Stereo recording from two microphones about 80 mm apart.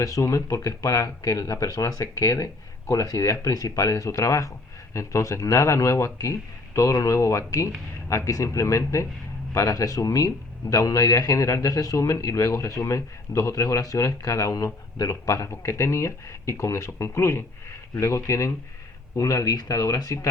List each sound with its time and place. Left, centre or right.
0.0 s a man's voice: left